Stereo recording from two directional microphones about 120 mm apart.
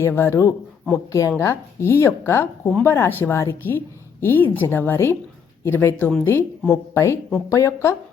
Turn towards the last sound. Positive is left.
turn(degrees=25)  # may be behind; listen again after turning